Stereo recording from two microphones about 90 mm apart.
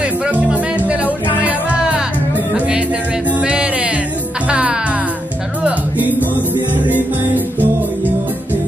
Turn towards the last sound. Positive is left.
turn(degrees=-20)  # may be behind; listen again after turning